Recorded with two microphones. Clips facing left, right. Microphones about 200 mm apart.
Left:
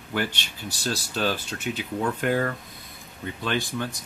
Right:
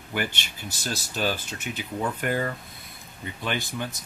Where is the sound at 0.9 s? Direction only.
10° right (ahead or behind).